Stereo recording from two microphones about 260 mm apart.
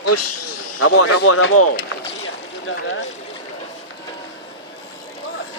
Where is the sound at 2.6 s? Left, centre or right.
Left.